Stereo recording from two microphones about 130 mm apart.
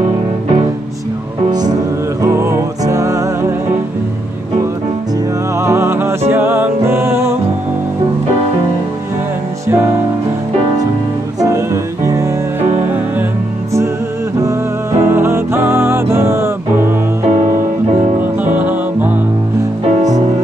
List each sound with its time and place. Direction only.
1.5 s music: 30° right (ahead or behind)
5.6 s music: 20° right (ahead or behind)
11.3 s music: 25° right (ahead or behind)
14.4 s music: 20° right (ahead or behind)